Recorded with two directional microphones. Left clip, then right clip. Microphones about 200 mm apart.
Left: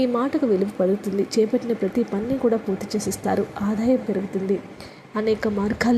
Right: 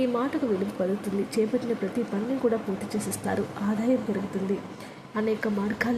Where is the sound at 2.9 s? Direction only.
15° left (ahead or behind).